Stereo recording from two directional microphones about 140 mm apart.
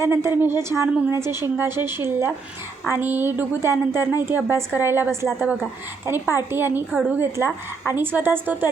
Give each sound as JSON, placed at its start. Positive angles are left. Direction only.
{"t": 0.0, "sound": "a woman's voice", "side_deg": -20}